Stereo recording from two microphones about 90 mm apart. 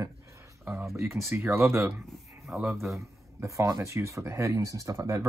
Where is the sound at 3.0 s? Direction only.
35° right (ahead or behind).